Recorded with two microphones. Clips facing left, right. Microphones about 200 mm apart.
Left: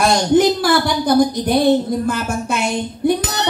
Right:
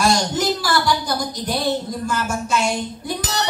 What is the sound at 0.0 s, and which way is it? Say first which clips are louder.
Speech: left 6 dB; 55° left (ahead or behind).